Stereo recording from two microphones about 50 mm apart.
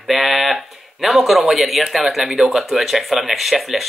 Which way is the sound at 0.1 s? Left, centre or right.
Centre.